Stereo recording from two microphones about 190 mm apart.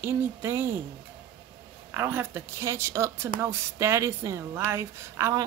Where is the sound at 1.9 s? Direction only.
15° right (ahead or behind).